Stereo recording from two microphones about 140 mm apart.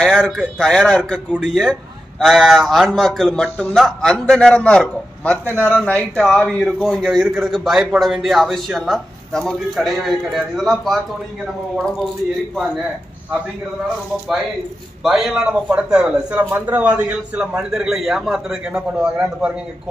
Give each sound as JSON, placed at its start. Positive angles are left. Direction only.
{"t": 0.0, "sound": "a man's voice", "side_deg": 5}
{"t": 15.0, "sound": "a man's voice", "side_deg": 0}